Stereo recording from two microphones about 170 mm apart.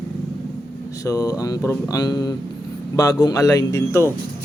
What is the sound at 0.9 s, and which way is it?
Speech, 20° left (ahead or behind).